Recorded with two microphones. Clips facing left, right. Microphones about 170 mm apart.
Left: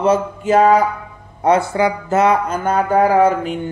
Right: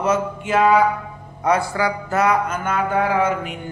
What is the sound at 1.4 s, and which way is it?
Speech, 25° left (ahead or behind).